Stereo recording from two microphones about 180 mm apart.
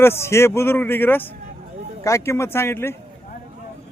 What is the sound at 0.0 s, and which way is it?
Speech, 15° left (ahead or behind).